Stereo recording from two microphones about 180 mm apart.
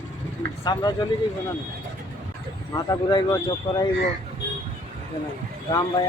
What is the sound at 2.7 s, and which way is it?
Speech, 25° left (ahead or behind).